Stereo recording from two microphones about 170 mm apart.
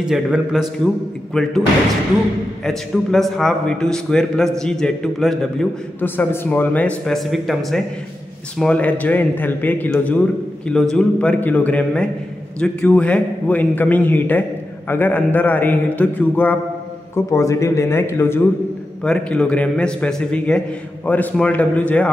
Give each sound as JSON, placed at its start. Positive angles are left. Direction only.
{"t": 0.0, "sound": "a man's voice", "side_deg": -5}
{"t": 2.6, "sound": "a man's voice", "side_deg": 5}